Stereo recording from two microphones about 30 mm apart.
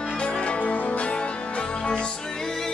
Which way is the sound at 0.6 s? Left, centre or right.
Left.